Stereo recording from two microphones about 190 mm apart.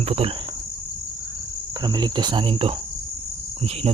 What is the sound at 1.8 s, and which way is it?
Cricket, 25° right (ahead or behind).